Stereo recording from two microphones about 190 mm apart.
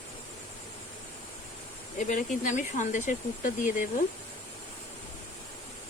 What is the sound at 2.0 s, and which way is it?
Speech, 40° left (ahead or behind).